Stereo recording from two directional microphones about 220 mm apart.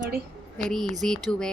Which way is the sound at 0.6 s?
Centre (ahead or behind).